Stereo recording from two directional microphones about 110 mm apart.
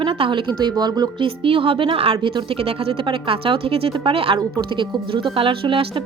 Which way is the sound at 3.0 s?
50° right (ahead or behind).